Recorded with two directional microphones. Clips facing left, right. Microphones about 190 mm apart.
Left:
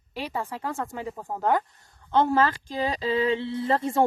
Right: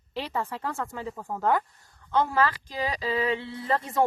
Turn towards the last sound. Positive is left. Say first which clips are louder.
# left 3 dB
turn(degrees=25)  # may be behind; listen again after turning